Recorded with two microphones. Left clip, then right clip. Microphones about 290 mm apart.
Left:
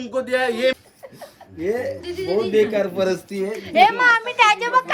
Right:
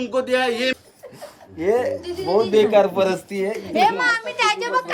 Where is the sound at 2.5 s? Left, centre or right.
Centre.